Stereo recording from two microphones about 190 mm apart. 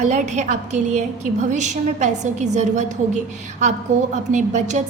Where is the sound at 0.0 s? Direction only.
40° right (ahead or behind).